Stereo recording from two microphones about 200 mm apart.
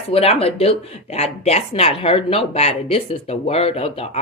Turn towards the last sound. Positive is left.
turn(degrees=30)  # may be behind; listen again after turning